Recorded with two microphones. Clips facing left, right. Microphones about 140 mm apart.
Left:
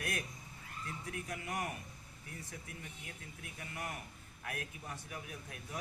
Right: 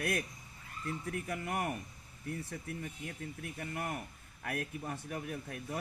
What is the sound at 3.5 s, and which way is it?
Speech, 50° right (ahead or behind).